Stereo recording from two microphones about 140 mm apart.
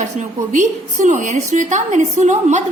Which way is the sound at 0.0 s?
60° right (ahead or behind).